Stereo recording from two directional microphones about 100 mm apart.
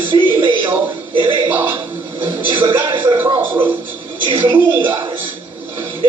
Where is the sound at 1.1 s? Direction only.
60° right (ahead or behind).